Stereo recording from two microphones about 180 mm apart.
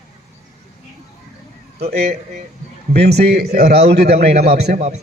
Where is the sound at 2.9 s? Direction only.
65° right (ahead or behind).